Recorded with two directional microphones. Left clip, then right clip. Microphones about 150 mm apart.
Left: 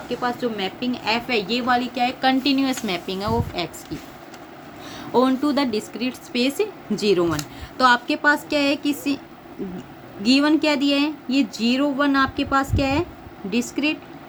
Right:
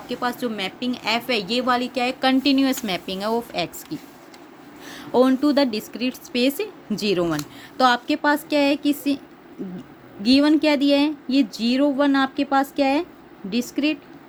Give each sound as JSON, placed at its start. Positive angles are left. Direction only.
{"t": 0.1, "sound": "a woman's voice", "side_deg": -90}
{"t": 10.2, "sound": "speech", "side_deg": -35}